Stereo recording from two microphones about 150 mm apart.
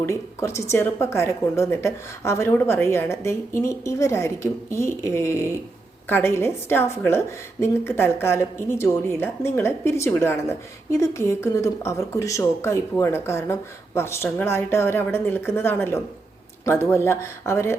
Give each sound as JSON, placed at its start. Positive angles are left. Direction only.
{"t": 0.0, "sound": "a woman's voice", "side_deg": 15}